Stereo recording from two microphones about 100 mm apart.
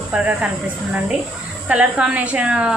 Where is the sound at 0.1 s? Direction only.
10° right (ahead or behind).